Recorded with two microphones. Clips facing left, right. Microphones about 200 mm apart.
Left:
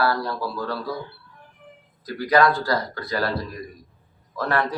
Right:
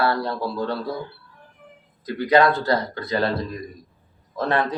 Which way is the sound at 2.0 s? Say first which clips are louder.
Right 2 dB; 25° right (ahead or behind).